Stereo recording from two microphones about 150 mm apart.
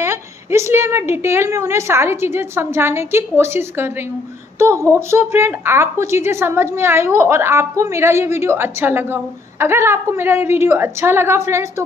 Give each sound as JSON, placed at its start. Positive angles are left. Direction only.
{"t": 0.0, "sound": "a woman's voice", "side_deg": -15}